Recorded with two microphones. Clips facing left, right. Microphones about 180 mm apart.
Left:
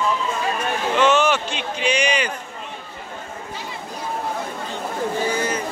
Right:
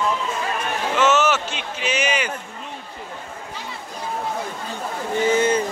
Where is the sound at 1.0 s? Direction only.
5° right (ahead or behind).